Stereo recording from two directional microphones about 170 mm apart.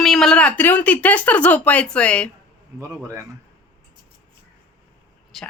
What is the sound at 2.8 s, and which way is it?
Speech, 20° right (ahead or behind).